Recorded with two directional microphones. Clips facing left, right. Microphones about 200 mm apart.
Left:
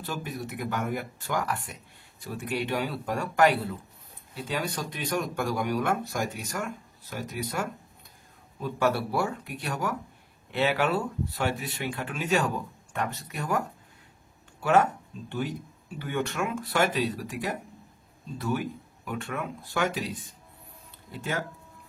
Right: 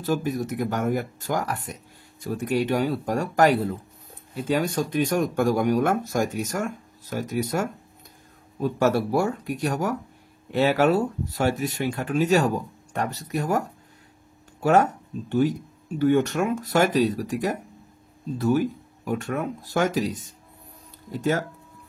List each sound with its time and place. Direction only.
0.0 s speech: 45° right (ahead or behind)
19.0 s speech: 40° right (ahead or behind)